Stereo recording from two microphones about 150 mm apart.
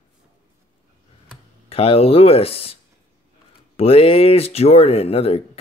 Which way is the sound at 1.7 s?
40° left (ahead or behind).